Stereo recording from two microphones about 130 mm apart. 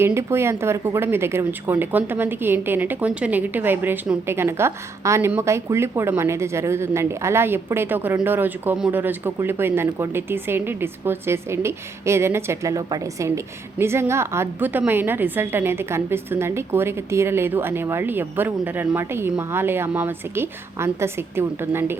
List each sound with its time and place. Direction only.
0.0 s speech: 20° right (ahead or behind)